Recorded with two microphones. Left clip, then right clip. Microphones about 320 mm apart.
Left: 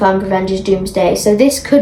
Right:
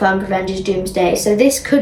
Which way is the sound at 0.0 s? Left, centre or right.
Centre.